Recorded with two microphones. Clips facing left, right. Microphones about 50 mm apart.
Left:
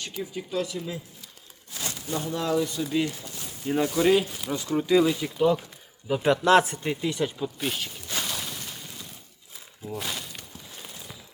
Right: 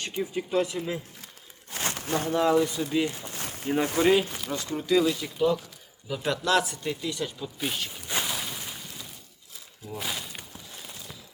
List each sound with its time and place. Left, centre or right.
0.1 s speech: right
1.7 s speech: right
2.3 s speech: right
2.7 s speech: centre
3.1 s speech: right
3.3 s a sound: right
4.0 s speech: right
4.5 s speech: centre
6.1 s a man's voice: left
7.6 s speech: centre
7.9 s a sound: centre
9.9 s speech: centre